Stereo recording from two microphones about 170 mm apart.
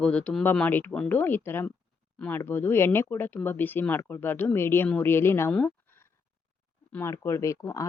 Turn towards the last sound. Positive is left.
turn(degrees=20)  # may be behind; listen again after turning